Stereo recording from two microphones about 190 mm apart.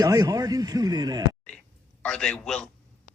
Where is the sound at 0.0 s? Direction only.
20° right (ahead or behind).